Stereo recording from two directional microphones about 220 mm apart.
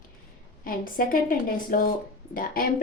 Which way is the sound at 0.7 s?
40° left (ahead or behind).